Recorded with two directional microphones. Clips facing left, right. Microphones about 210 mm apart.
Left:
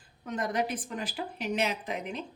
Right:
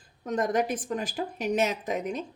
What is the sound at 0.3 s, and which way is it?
Speech, 45° right (ahead or behind).